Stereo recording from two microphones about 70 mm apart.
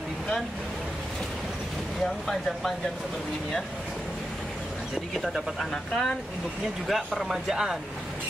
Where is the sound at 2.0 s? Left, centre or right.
Centre.